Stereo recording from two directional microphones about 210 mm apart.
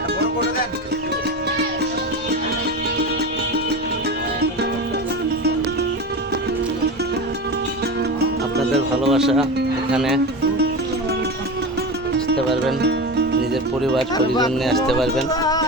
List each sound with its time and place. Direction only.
9.0 s speech: centre (ahead or behind)
12.8 s music: 55° right (ahead or behind)
13.5 s speech: centre (ahead or behind)
15.3 s music: 20° left (ahead or behind)